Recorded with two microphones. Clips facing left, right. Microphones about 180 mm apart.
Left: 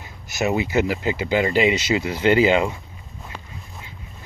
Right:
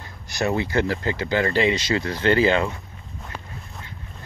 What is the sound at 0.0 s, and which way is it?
Speech, 15° left (ahead or behind).